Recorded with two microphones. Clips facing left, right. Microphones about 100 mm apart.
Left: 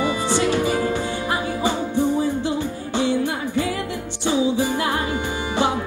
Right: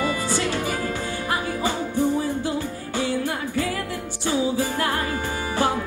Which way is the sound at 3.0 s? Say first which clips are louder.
Left 4 dB; 20° left (ahead or behind).